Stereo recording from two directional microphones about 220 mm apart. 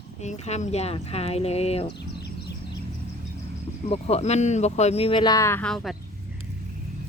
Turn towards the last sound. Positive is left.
turn(degrees=0)  # may be behind; listen again after turning